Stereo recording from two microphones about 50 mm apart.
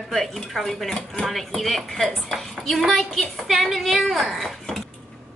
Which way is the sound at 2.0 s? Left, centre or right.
Centre.